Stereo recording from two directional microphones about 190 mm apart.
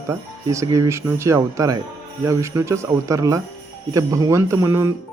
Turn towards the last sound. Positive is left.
turn(degrees=-15)  # may be behind; listen again after turning